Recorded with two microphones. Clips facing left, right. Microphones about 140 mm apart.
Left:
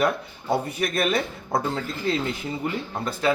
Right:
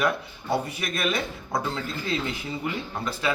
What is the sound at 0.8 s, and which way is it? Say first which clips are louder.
Speech: left 4 dB; 50° left (ahead or behind).